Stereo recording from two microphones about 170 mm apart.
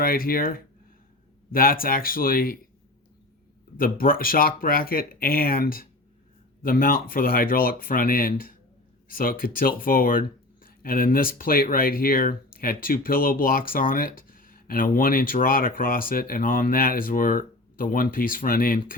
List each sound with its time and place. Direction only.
0.0 s speech: 60° left (ahead or behind)
3.8 s speech: 55° left (ahead or behind)